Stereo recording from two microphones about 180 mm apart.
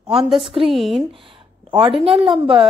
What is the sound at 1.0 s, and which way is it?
Speech, 30° right (ahead or behind).